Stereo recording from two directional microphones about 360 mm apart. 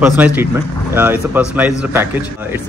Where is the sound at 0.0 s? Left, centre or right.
Centre.